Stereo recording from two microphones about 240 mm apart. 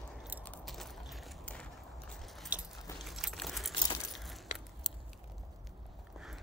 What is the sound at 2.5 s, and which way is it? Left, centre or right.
Keys jangling, centre.